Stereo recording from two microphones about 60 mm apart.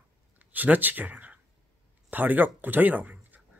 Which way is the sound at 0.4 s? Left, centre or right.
Right.